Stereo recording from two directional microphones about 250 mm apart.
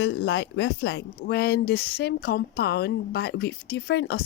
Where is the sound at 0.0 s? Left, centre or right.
Left.